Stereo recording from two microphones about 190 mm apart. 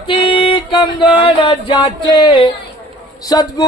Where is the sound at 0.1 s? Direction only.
25° left (ahead or behind).